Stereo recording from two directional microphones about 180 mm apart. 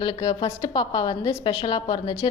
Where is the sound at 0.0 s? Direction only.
25° left (ahead or behind).